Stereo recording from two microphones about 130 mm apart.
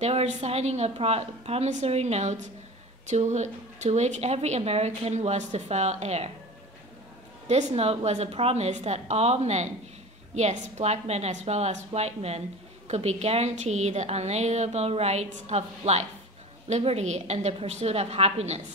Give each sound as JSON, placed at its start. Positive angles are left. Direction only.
{"t": 0.0, "sound": "a woman's voice", "side_deg": -55}
{"t": 7.4, "sound": "a woman's voice", "side_deg": -55}